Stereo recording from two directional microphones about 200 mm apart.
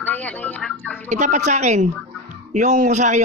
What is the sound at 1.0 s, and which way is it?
A man's voice, 35° right (ahead or behind).